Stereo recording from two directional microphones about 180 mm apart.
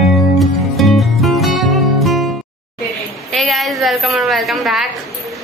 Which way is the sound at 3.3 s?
Centre (ahead or behind).